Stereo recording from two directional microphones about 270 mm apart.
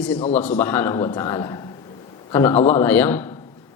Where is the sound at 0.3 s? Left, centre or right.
Centre.